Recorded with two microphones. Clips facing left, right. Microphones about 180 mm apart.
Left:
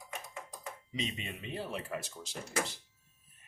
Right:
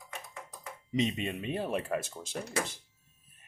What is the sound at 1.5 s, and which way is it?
Speech, 55° right (ahead or behind).